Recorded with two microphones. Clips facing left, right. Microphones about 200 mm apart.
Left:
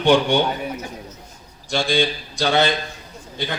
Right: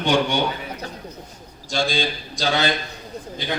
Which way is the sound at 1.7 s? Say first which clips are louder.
Left 3 dB; 55° left (ahead or behind).